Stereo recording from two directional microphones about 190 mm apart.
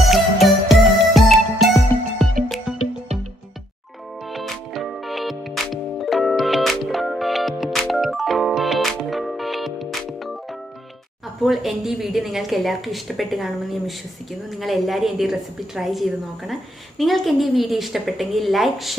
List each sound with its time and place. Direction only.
0.0 s music: centre (ahead or behind)
4.3 s music: centre (ahead or behind)
11.4 s a woman's voice: centre (ahead or behind)